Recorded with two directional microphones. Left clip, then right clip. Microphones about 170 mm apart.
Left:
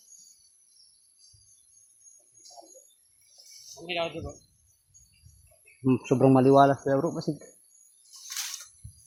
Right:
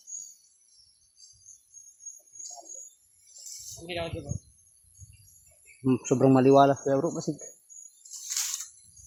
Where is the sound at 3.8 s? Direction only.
40° left (ahead or behind).